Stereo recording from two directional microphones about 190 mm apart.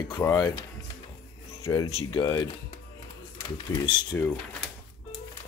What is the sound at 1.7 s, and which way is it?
Speech, 25° left (ahead or behind).